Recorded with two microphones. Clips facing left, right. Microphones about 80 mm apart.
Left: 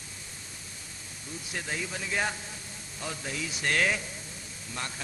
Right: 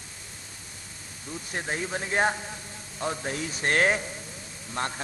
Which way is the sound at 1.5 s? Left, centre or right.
Right.